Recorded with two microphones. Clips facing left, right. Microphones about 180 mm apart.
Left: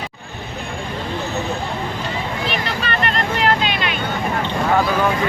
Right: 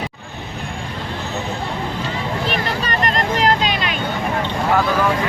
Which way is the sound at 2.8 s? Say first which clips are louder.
Even; 40° right (ahead or behind).